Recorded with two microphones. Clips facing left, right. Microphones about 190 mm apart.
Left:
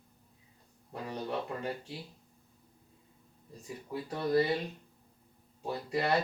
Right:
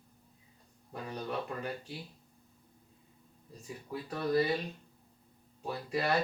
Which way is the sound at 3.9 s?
25° left (ahead or behind).